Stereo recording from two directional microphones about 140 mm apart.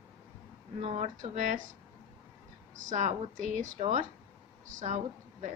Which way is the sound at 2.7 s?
60° right (ahead or behind).